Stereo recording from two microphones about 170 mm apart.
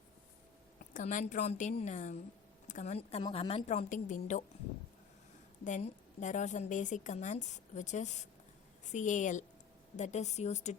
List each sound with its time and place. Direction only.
0.8 s a woman's voice: 50° left (ahead or behind)
5.6 s a woman's voice: 45° left (ahead or behind)